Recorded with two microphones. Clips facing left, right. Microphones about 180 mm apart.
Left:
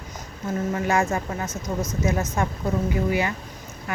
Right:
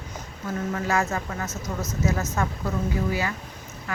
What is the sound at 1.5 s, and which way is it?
Speech, 5° right (ahead or behind).